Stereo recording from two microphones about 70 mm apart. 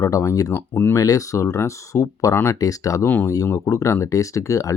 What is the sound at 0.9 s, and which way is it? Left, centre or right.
Speech, left.